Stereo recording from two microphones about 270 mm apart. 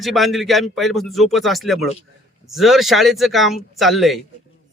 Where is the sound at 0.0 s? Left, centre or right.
Centre.